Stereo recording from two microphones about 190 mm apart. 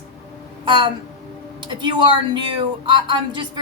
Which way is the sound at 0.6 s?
25° right (ahead or behind).